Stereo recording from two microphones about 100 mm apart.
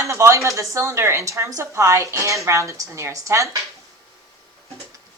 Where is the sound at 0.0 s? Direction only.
30° right (ahead or behind).